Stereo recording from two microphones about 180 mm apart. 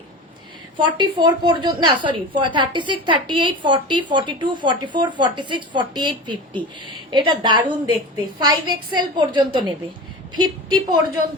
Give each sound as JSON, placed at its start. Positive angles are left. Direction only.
{"t": 0.8, "sound": "a woman's voice", "side_deg": -25}